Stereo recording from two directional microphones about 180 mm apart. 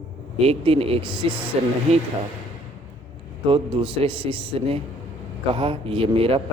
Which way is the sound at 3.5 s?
30° right (ahead or behind).